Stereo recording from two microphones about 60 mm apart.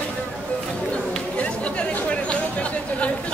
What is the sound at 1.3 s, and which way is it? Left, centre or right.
Chatter, left.